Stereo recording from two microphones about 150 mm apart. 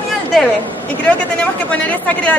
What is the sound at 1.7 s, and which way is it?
Speech, 10° left (ahead or behind).